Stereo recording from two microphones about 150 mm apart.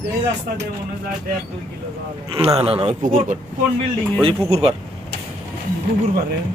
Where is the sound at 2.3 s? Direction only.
40° right (ahead or behind).